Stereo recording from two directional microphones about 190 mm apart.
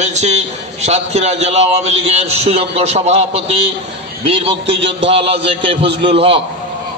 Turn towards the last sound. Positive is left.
turn(degrees=-30)  # may be behind; listen again after turning